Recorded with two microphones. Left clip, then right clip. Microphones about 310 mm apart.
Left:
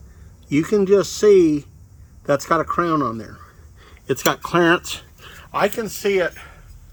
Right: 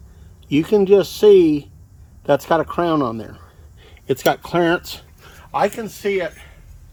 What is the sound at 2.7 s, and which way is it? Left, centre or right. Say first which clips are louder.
Speech: right 1 dB; centre.